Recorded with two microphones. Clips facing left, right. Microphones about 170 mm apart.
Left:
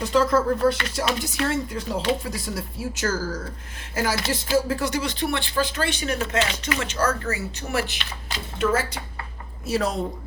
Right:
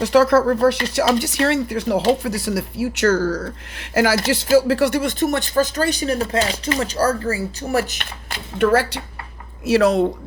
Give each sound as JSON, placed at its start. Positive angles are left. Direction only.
{"t": 0.0, "sound": "speech", "side_deg": -75}
{"t": 4.5, "sound": "speech", "side_deg": -70}
{"t": 8.5, "sound": "speech", "side_deg": -70}
{"t": 9.6, "sound": "speech", "side_deg": -80}